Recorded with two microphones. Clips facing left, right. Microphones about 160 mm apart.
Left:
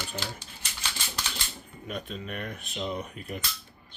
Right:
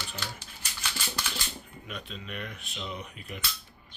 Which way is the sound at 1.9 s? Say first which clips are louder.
Left 5 dB; 45° left (ahead or behind).